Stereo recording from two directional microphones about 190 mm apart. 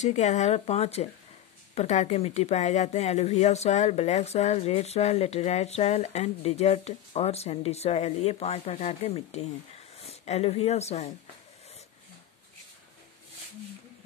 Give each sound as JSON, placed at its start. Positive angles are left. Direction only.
{"t": 0.0, "sound": "speech", "side_deg": 40}